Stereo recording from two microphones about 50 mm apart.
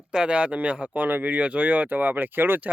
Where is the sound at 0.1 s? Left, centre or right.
Centre.